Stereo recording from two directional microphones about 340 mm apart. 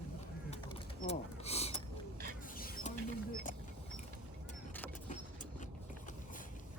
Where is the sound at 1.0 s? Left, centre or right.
Centre.